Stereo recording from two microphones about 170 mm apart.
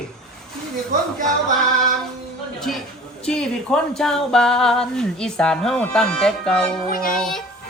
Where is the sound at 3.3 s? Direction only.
5° left (ahead or behind).